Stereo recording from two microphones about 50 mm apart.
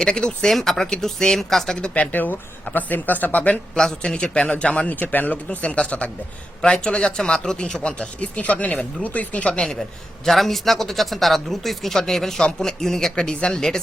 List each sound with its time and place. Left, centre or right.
0.0 s speech: centre
0.4 s speech: centre
1.8 s speech: left
2.1 s speech: left
3.8 s speech: centre; by 5.4 s left
5.5 s speech: left
10.2 s speech: centre